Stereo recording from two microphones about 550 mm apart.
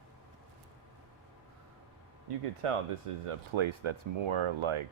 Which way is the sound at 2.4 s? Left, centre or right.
Right.